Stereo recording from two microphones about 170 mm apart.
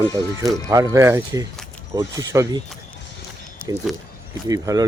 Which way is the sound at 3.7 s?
20° right (ahead or behind).